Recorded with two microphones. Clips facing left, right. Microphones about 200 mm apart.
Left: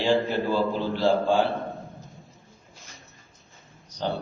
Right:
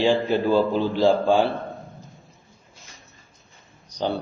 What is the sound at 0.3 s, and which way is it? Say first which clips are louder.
Speech: right 5 dB; 15° right (ahead or behind).